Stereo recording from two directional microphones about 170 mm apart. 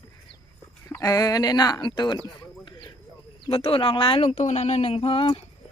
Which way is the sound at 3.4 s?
35° left (ahead or behind).